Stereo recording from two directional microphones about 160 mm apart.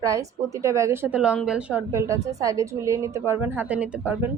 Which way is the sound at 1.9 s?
20° right (ahead or behind).